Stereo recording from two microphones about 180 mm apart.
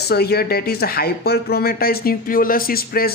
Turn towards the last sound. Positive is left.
turn(degrees=55)  # may be behind; listen again after turning